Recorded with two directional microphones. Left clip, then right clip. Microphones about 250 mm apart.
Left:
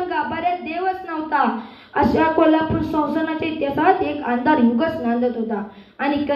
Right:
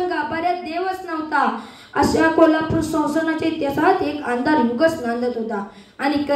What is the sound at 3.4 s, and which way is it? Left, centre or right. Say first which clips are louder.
A woman's voice: right 1 dB; right.